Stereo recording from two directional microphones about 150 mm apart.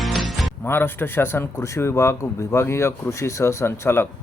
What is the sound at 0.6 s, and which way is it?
Speech, 15° left (ahead or behind).